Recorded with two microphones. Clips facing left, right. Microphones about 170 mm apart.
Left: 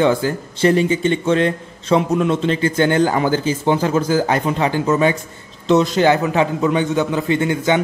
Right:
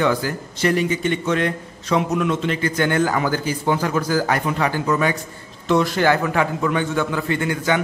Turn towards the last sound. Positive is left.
turn(degrees=20)  # may be behind; listen again after turning